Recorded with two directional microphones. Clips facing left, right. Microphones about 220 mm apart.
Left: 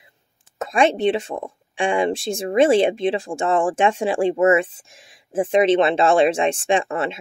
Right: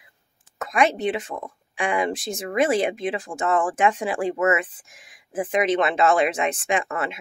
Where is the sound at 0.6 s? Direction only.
30° left (ahead or behind).